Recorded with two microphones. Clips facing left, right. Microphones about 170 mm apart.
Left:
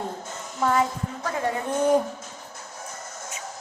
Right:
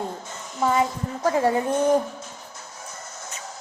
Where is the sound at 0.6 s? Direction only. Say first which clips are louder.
Right 1 dB; 15° right (ahead or behind).